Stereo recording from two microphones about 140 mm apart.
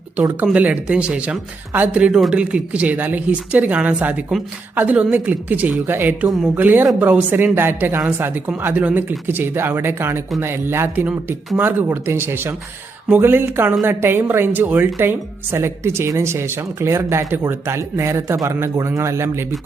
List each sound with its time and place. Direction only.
0.4 s speech: 5° right (ahead or behind)